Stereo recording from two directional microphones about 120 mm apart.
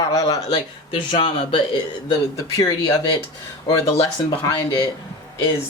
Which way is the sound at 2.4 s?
30° left (ahead or behind).